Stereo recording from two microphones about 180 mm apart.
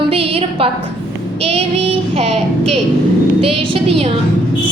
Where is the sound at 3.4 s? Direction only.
30° right (ahead or behind).